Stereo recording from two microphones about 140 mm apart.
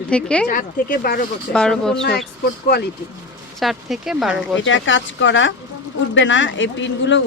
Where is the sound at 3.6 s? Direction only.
Centre (ahead or behind).